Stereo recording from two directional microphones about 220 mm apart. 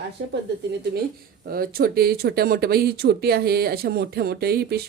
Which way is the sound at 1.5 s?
40° right (ahead or behind).